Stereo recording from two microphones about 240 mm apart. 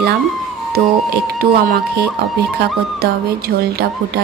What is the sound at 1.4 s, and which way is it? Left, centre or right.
Speech, right.